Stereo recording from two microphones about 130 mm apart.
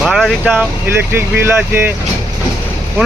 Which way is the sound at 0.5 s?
15° right (ahead or behind).